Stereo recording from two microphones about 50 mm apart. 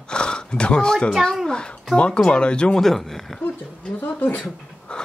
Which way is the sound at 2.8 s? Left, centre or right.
Centre.